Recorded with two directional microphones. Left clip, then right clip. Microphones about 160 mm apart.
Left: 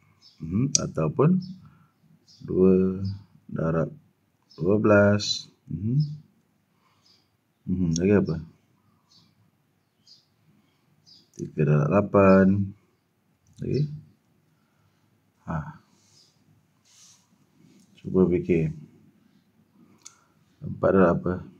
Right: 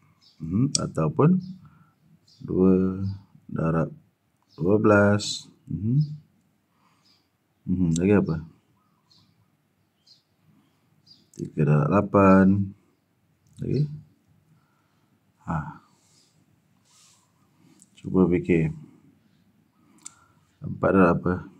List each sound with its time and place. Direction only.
0.4 s speech: 15° right (ahead or behind)
2.4 s speech: 20° right (ahead or behind)
7.7 s speech: 25° right (ahead or behind)
11.3 s speech: 20° right (ahead or behind)
13.6 s speech: 20° right (ahead or behind)
15.4 s a sound: 25° right (ahead or behind)
17.9 s speech: 25° right (ahead or behind)
20.6 s speech: 25° right (ahead or behind)